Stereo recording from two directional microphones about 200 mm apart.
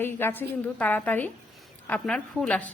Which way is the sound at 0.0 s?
10° left (ahead or behind).